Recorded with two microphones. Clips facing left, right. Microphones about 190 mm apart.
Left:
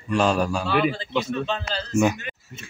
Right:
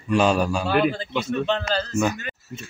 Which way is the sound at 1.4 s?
60° right (ahead or behind).